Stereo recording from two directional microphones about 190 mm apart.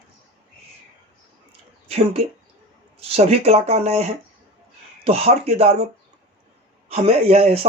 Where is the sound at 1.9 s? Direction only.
35° right (ahead or behind).